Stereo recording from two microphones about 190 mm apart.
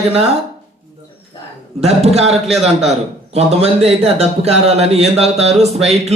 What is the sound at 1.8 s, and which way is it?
A man's voice, 35° right (ahead or behind).